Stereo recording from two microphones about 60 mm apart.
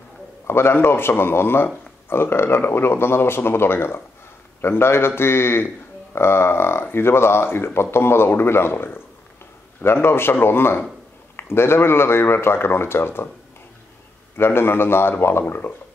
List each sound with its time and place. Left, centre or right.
0.5 s speech: left
14.3 s speech: left